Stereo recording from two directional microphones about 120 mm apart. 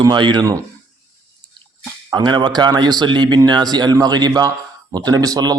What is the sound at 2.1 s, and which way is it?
Speech, 40° right (ahead or behind).